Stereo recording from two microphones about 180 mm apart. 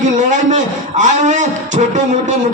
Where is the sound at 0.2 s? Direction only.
45° right (ahead or behind).